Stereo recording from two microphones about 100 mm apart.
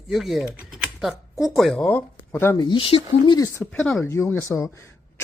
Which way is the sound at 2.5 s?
50° left (ahead or behind).